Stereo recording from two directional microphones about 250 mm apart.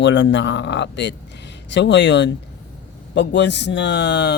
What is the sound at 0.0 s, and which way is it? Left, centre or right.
Speech, left.